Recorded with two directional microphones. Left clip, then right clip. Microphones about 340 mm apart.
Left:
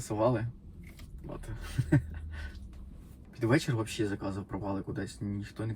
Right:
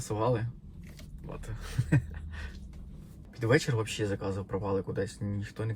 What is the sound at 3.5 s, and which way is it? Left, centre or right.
Speech, centre.